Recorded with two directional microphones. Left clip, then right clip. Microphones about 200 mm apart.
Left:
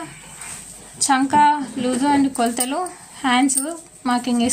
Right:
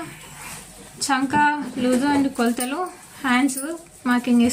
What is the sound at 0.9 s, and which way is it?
A woman's voice, 50° left (ahead or behind).